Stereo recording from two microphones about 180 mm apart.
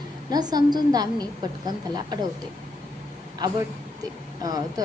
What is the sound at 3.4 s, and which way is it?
A woman's voice, 20° right (ahead or behind).